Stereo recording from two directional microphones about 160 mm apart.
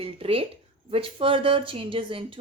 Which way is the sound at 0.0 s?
35° right (ahead or behind).